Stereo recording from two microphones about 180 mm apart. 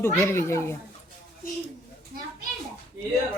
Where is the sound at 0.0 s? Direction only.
15° left (ahead or behind).